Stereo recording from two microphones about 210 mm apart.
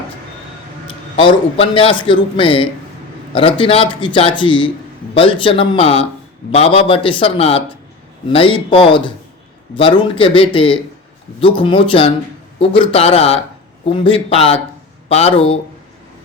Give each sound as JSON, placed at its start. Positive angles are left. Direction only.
{"t": 1.1, "sound": "a man's voice", "side_deg": 25}